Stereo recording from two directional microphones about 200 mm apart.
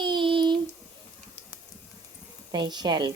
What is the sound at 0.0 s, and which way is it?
Child singing, 25° right (ahead or behind).